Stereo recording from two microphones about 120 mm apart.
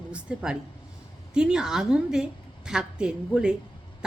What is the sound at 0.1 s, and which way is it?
A woman's voice, 10° right (ahead or behind).